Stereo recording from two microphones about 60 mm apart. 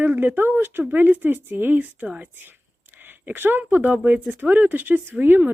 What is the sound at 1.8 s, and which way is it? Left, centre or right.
Speech, right.